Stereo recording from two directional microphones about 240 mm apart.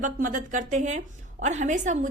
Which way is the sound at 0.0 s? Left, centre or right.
Right.